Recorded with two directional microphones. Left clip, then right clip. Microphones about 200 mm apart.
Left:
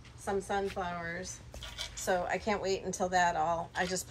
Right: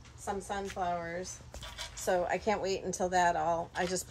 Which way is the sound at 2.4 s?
50° right (ahead or behind).